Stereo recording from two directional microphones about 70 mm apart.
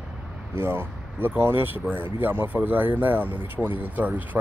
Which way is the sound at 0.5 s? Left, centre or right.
Right.